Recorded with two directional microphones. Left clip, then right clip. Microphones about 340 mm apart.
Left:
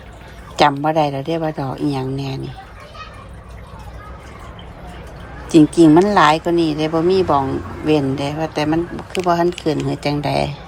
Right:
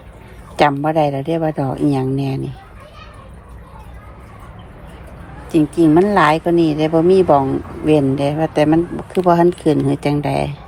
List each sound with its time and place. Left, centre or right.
0.5 s a woman's voice: centre
5.5 s a woman's voice: centre